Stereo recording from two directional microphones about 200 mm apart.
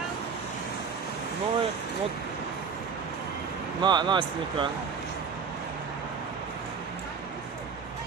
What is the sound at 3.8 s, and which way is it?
Speech, 20° right (ahead or behind).